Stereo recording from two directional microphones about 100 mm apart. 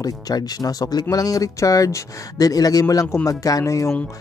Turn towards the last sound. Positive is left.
turn(degrees=30)  # may be behind; listen again after turning